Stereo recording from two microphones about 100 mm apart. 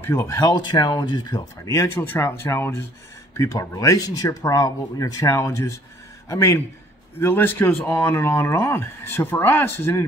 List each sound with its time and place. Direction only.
0.0 s speech: 25° left (ahead or behind)
0.6 s speech: 45° left (ahead or behind); by 10.0 s 25° left (ahead or behind)